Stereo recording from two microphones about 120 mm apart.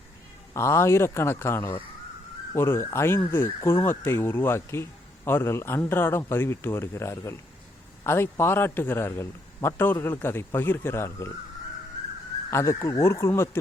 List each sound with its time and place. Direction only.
0.5 s speech: 20° left (ahead or behind)
12.5 s speech: 25° left (ahead or behind)